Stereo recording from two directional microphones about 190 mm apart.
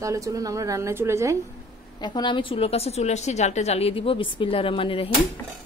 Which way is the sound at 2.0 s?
25° left (ahead or behind).